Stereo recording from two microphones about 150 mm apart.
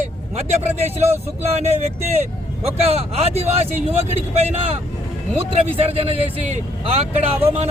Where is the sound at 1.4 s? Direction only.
45° right (ahead or behind).